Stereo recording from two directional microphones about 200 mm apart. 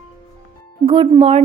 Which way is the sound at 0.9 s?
25° right (ahead or behind).